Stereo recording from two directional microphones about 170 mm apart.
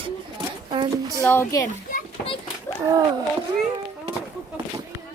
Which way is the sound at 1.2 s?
10° left (ahead or behind).